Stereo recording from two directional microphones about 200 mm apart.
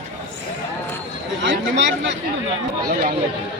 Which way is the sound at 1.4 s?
65° right (ahead or behind).